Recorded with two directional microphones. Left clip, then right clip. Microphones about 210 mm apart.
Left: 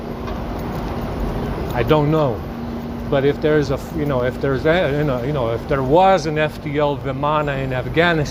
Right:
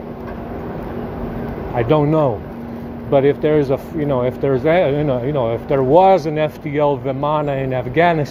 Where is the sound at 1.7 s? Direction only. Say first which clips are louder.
Right 2 dB; 50° right (ahead or behind).